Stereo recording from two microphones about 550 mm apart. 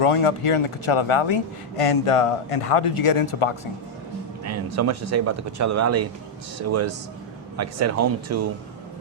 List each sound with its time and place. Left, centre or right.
0.0 s a man's voice: left
4.4 s speech: right